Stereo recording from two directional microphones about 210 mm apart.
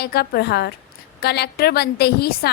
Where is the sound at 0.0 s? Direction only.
50° left (ahead or behind).